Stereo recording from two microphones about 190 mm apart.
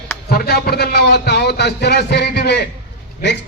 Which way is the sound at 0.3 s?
55° left (ahead or behind).